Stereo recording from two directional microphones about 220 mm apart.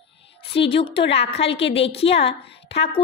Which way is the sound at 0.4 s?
25° left (ahead or behind).